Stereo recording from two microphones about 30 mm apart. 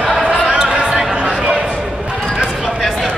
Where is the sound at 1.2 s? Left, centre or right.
Right.